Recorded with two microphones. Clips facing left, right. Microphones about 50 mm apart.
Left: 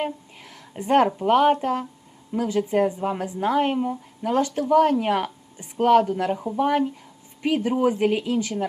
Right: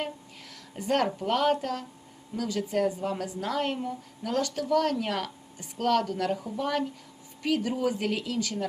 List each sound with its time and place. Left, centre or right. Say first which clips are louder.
0.0 s a woman's voice: left 6 dB; left